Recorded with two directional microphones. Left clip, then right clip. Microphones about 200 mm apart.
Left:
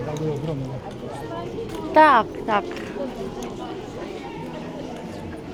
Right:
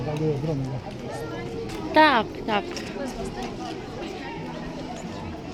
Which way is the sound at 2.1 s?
20° right (ahead or behind).